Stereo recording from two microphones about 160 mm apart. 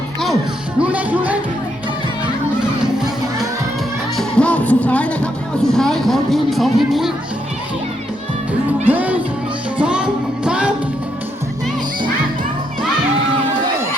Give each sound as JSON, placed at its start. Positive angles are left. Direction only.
{"t": 0.8, "sound": "speech", "side_deg": -10}
{"t": 2.8, "sound": "music", "side_deg": -5}
{"t": 4.2, "sound": "speech", "side_deg": 5}
{"t": 8.9, "sound": "speech", "side_deg": -10}
{"t": 9.7, "sound": "music", "side_deg": -5}